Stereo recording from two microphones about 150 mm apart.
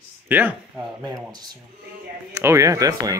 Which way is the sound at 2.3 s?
20° right (ahead or behind).